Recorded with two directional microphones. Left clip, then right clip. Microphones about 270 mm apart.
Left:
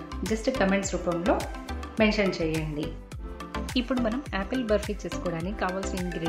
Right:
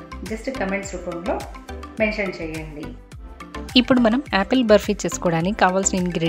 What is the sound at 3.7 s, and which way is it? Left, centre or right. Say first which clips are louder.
Speech: right 12 dB; right.